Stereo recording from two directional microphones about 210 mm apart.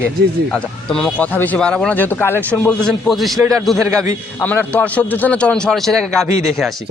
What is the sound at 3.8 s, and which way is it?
Speech, 15° right (ahead or behind).